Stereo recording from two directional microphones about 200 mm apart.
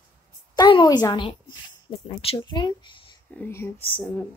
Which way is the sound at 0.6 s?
20° left (ahead or behind).